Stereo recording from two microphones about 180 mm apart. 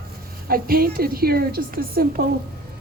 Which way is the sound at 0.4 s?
55° right (ahead or behind).